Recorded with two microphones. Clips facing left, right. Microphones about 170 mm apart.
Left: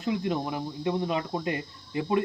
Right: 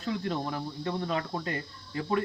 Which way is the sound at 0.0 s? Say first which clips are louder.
Left 3 dB; 15° left (ahead or behind).